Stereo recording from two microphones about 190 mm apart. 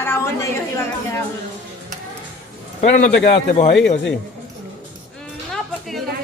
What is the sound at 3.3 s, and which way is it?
Speech, 35° left (ahead or behind).